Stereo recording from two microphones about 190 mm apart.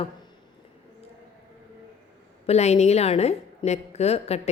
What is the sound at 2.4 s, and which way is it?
A woman's voice, 35° left (ahead or behind).